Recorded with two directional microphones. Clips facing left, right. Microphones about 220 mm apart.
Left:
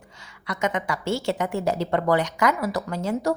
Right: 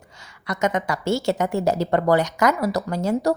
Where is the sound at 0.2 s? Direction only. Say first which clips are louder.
Right 3 dB; 40° right (ahead or behind).